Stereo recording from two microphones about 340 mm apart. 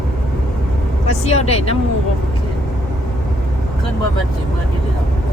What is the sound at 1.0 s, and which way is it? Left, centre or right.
Vehicle, centre.